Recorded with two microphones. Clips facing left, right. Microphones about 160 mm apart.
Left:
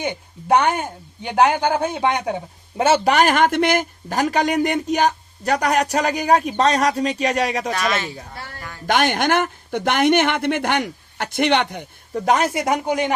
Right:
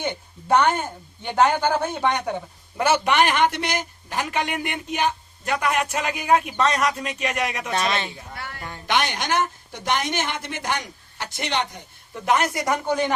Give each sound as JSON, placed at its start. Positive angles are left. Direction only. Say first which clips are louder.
{"t": 0.0, "sound": "speech", "louder": "left 2 dB", "side_deg": 10}
{"t": 2.8, "sound": "speech", "louder": "left 4 dB", "side_deg": 25}
{"t": 3.1, "sound": "speech", "louder": "left 3 dB", "side_deg": 40}
{"t": 7.7, "sound": "a woman's voice", "louder": "left 2 dB", "side_deg": -25}
{"t": 8.9, "sound": "speech", "louder": "left 6 dB", "side_deg": 50}
{"t": 12.1, "sound": "speech", "louder": "left 3 dB", "side_deg": 40}
{"t": 12.5, "sound": "speech", "louder": "left 3 dB", "side_deg": 15}